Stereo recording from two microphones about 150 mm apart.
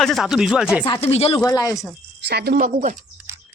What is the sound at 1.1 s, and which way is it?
Speech, 40° left (ahead or behind).